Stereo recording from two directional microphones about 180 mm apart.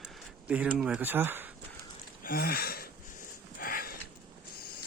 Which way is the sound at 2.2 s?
55° left (ahead or behind).